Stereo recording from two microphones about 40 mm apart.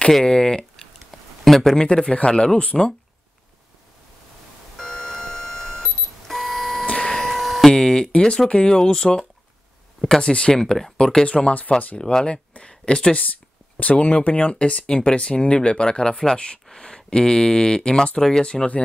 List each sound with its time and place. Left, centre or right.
0.2 s speech: centre
1.4 s speech: centre
2.0 s speech: left
4.7 s alarm clock: centre
6.9 s printer: centre
7.2 s a sound: centre
7.7 s a sound: centre
8.5 s speech: left
11.2 s speech: left
12.0 s speech: centre
13.7 s speech: left